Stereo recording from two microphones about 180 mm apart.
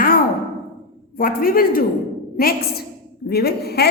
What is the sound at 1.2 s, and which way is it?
A woman's voice, 55° left (ahead or behind).